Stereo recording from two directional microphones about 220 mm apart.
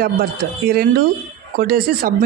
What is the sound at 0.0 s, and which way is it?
Speech, 45° right (ahead or behind).